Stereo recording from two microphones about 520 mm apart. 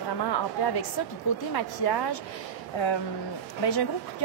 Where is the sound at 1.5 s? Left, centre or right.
Left.